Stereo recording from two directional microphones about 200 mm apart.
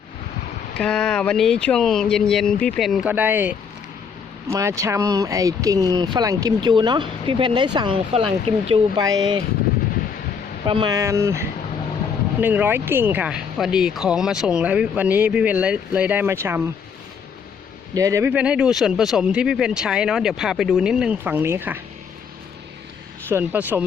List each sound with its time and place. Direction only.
0.8 s speech: 5° left (ahead or behind); by 9.4 s 20° right (ahead or behind)
10.7 s speech: 20° right (ahead or behind)
17.9 s speech: 15° right (ahead or behind)
23.3 s speech: 10° right (ahead or behind)